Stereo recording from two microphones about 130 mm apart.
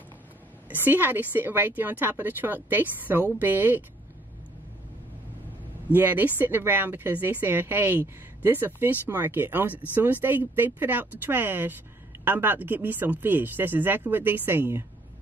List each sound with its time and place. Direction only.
0.7 s speech: 15° right (ahead or behind)
5.9 s speech: 15° right (ahead or behind)